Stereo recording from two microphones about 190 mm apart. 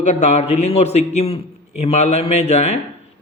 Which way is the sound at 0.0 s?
35° left (ahead or behind).